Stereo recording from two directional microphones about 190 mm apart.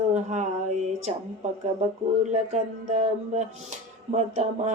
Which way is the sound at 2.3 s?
40° right (ahead or behind).